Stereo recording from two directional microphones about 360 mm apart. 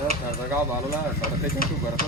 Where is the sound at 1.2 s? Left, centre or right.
Left.